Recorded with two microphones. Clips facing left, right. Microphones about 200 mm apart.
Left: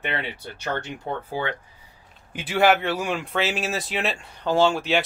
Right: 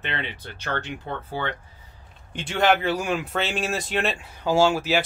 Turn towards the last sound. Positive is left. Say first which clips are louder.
# even
turn(degrees=-5)  # may be behind; listen again after turning